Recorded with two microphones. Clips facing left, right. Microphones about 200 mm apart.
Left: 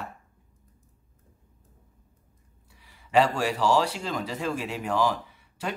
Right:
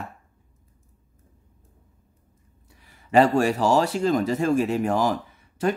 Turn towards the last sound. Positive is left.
turn(degrees=-45)  # may be behind; listen again after turning